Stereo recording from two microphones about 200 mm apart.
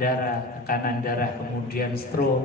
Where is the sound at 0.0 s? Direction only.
45° left (ahead or behind).